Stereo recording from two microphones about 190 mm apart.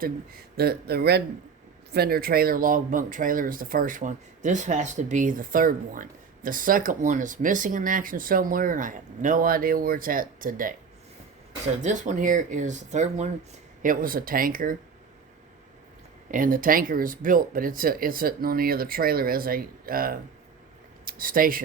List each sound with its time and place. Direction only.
0.0 s speech: 55° right (ahead or behind)
11.8 s speech: 40° right (ahead or behind)
16.3 s speech: 45° right (ahead or behind)